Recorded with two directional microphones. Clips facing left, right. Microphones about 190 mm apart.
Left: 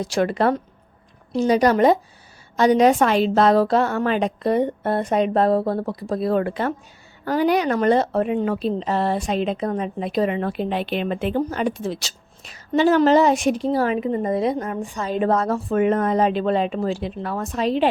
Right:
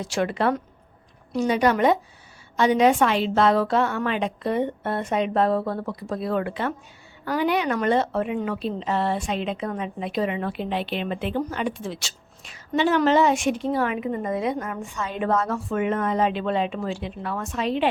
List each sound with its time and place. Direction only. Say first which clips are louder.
0.0 s a woman's voice: left 4 dB; 40° left (ahead or behind)